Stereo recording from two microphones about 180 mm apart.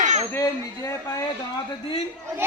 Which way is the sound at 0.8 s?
15° left (ahead or behind).